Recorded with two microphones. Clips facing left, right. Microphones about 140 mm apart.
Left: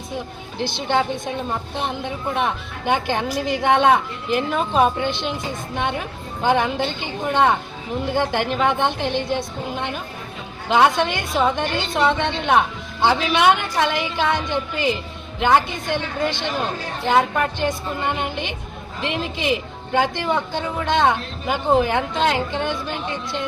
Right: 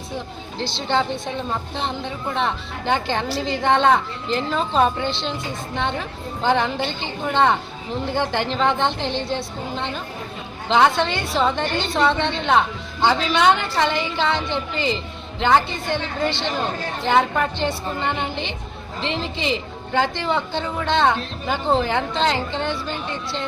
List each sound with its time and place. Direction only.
0.8 s a woman's voice: 15° left (ahead or behind)
17.1 s a woman's voice: centre (ahead or behind)